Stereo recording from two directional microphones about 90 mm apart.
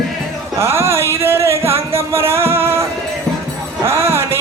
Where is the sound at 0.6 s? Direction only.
30° right (ahead or behind).